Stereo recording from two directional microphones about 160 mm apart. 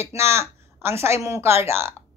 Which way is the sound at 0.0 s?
15° right (ahead or behind).